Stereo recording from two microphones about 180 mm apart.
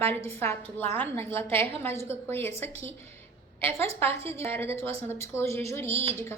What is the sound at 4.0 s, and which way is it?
A woman's voice, 15° left (ahead or behind).